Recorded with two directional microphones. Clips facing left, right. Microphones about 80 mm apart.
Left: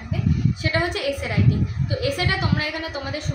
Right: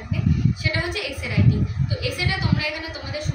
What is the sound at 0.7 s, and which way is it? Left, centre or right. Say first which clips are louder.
A woman's voice: left 5 dB; left.